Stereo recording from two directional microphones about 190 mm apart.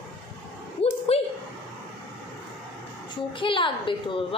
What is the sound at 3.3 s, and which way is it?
A woman's voice, 25° left (ahead or behind).